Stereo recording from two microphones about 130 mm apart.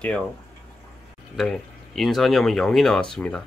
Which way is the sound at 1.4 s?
Centre (ahead or behind).